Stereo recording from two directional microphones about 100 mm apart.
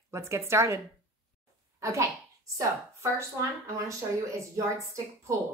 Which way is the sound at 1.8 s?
30° right (ahead or behind).